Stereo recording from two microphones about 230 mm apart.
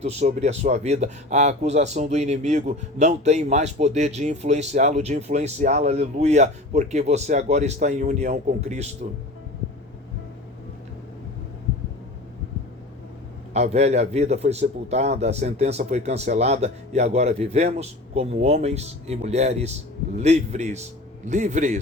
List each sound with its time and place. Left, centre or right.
0.0 s speech: right
13.5 s a man's voice: right